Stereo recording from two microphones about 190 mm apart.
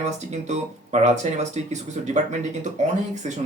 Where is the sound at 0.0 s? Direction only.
35° right (ahead or behind).